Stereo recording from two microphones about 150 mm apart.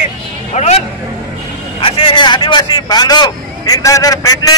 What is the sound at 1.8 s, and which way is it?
A man's voice, 35° left (ahead or behind).